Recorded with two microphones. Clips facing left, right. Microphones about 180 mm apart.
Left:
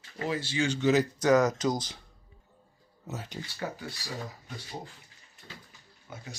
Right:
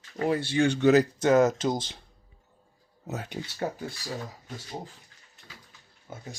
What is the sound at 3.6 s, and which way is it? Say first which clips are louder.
Speech: right 5 dB; 40° right (ahead or behind).